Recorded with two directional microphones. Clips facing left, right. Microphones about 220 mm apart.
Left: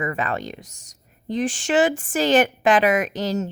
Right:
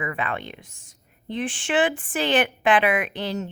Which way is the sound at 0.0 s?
40° left (ahead or behind).